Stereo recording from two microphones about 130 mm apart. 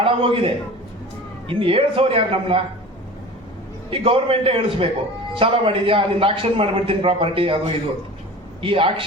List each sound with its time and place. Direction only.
0.0 s a man's voice: 45° right (ahead or behind)
3.8 s a man's voice: 45° right (ahead or behind)
8.6 s a man's voice: 45° right (ahead or behind)